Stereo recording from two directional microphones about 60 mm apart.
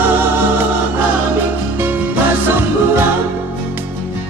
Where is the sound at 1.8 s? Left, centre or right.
Right.